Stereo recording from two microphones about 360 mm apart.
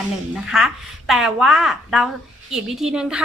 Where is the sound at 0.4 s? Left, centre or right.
Centre.